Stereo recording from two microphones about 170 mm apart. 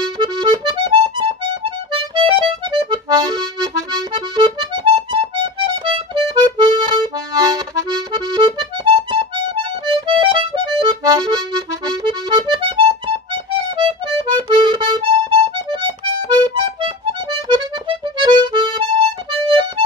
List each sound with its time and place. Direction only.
0.2 s accordion: 25° right (ahead or behind)